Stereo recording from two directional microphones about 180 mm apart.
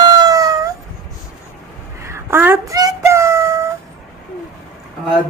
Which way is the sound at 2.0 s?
15° right (ahead or behind).